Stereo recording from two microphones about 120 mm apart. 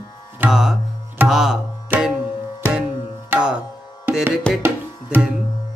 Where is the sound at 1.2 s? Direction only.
5° right (ahead or behind).